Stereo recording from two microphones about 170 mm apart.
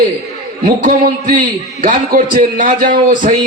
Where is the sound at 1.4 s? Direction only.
55° right (ahead or behind).